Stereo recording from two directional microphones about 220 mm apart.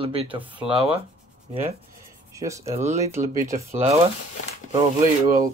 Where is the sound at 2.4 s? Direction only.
15° right (ahead or behind).